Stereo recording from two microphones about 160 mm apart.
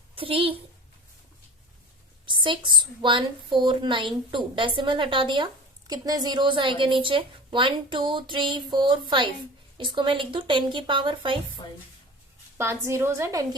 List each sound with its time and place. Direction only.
0.2 s a woman's voice: 35° right (ahead or behind)
2.2 s a woman's voice: 30° right (ahead or behind)
12.5 s a woman's voice: 15° right (ahead or behind)